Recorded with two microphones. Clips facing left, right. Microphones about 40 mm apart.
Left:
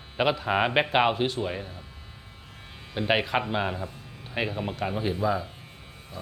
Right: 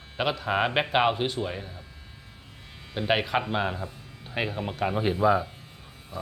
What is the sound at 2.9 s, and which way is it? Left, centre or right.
Speech, centre.